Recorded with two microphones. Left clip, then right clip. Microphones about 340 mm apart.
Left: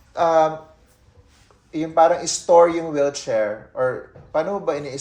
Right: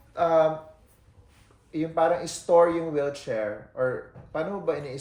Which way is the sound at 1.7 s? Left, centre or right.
Centre.